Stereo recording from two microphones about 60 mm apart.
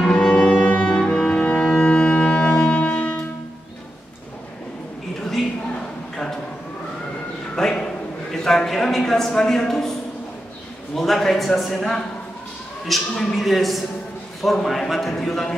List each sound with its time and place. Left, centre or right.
0.0 s music: centre
7.5 s a sound: centre
11.0 s a man's voice: centre